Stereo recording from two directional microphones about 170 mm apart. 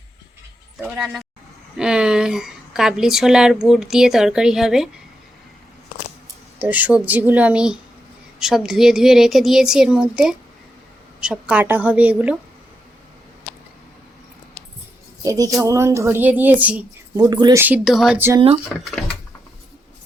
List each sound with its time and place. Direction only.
0.8 s a woman's voice: 10° right (ahead or behind)
6.6 s a woman's voice: 10° right (ahead or behind)
15.2 s speech: 20° right (ahead or behind)
17.2 s speech: 25° right (ahead or behind)
17.6 s speech: 5° right (ahead or behind)
18.3 s speech: 35° right (ahead or behind)